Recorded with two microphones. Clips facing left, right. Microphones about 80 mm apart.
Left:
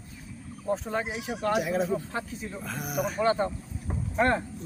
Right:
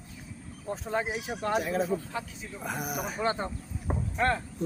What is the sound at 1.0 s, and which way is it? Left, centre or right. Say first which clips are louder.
Speech: even; centre.